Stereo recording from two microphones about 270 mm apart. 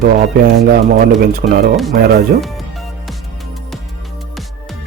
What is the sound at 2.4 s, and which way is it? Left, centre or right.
Music, centre.